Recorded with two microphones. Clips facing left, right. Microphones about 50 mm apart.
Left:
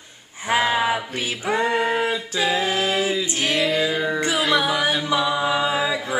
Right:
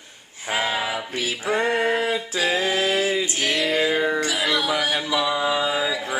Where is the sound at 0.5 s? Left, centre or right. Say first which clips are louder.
Left 5 dB; left.